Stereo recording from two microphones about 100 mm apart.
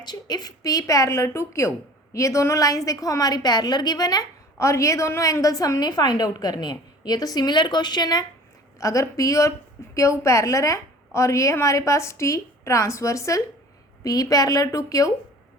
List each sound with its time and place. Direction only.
0.0 s a woman's voice: 45° left (ahead or behind)
4.5 s a woman's voice: 30° left (ahead or behind)
8.8 s a woman's voice: 30° left (ahead or behind)